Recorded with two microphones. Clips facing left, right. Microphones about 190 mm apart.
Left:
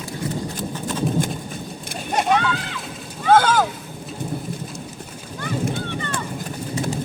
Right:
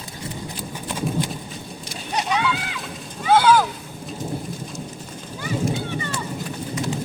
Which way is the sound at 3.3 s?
45° left (ahead or behind).